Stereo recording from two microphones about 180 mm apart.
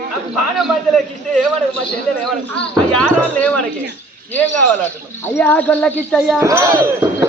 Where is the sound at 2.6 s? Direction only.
5° left (ahead or behind).